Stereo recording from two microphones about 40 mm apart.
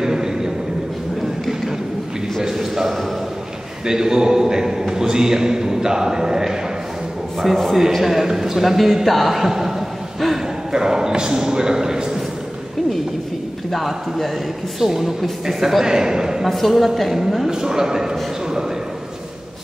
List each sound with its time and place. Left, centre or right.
0.0 s a sound: centre
2.4 s a sound: centre
3.8 s a man's voice: centre
7.3 s a man's voice: centre
10.7 s a man's voice: centre
13.7 s a man's voice: centre
16.4 s speech: centre
17.5 s a man's voice: centre